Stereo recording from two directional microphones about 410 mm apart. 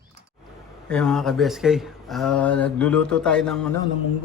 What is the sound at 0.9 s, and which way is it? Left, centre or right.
Speech, centre.